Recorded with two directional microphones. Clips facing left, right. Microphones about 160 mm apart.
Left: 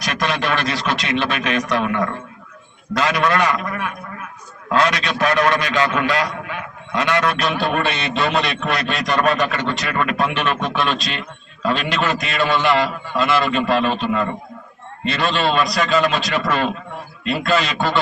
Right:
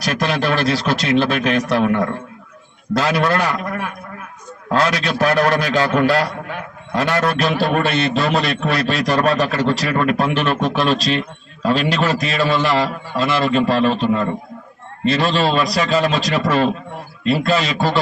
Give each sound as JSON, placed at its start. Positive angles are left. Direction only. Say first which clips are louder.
{"t": 0.1, "sound": "a man's voice", "louder": "right 3 dB", "side_deg": -35}